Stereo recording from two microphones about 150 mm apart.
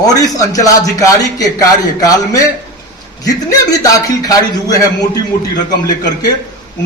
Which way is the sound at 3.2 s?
25° left (ahead or behind).